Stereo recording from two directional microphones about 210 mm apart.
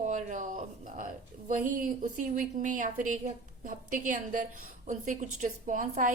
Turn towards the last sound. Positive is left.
turn(degrees=-40)  # may be behind; listen again after turning